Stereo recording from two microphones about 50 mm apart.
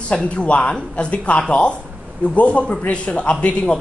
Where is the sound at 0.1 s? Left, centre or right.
Centre.